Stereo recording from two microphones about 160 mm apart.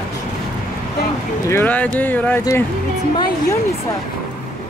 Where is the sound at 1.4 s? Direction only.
15° left (ahead or behind).